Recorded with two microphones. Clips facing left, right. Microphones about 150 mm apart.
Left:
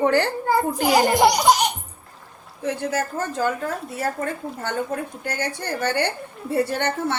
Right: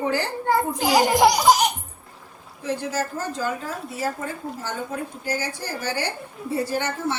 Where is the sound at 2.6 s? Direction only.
60° left (ahead or behind).